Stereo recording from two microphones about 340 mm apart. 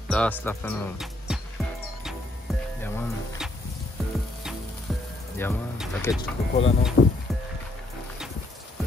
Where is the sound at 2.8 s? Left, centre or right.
Centre.